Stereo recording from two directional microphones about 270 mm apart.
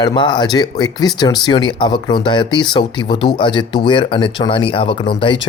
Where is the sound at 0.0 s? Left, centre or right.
Centre.